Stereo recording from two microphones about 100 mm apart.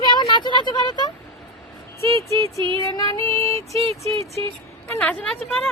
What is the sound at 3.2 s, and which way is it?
Music, 65° right (ahead or behind).